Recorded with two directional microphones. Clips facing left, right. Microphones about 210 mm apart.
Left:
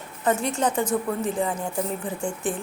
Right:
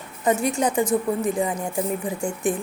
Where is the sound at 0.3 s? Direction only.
10° right (ahead or behind).